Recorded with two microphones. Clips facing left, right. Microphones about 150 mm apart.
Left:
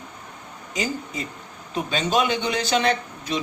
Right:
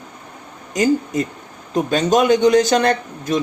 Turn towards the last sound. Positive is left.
turn(degrees=-45)  # may be behind; listen again after turning